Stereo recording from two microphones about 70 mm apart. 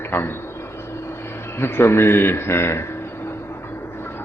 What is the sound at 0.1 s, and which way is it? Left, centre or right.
Speech, left.